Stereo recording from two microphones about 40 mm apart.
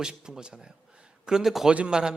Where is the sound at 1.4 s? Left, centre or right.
Centre.